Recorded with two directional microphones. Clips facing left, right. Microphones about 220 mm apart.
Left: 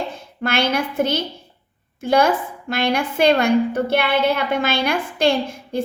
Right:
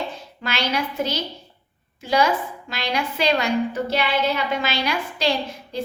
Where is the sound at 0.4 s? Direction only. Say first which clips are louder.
Left 5 dB; 50° left (ahead or behind).